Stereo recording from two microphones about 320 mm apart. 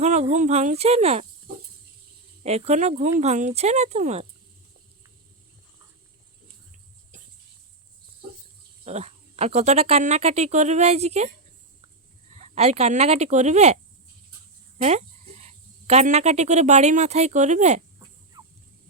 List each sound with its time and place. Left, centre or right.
0.0 s speech: right
2.4 s speech: centre
8.8 s speech: centre
12.3 s speech: centre
14.8 s cricket: right